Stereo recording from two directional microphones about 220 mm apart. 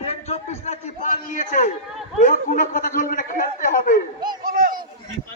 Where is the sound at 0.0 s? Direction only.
30° left (ahead or behind).